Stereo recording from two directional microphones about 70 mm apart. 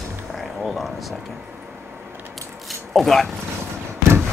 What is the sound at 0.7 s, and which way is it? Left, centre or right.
Speech, centre.